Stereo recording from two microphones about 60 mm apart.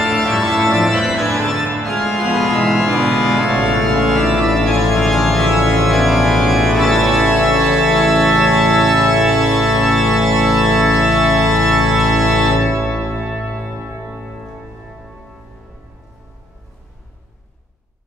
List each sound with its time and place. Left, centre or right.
0.0 s organ: centre
13.7 s music: right